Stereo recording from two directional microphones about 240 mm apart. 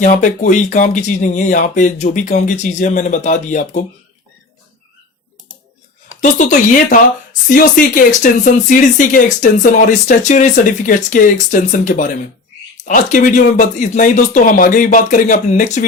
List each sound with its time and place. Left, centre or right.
0.0 s speech: left
6.1 s speech: left